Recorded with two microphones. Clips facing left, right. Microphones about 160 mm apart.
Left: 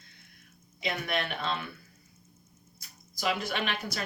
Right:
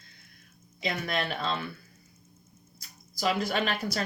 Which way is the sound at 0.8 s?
35° right (ahead or behind).